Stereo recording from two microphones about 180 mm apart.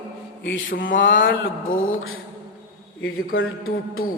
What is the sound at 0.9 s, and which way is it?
Speech, 90° left.